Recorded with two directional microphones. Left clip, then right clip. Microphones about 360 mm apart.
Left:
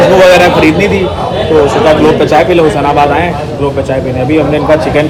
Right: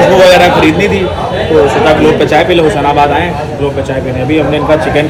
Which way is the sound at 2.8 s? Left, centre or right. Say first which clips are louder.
Even; centre.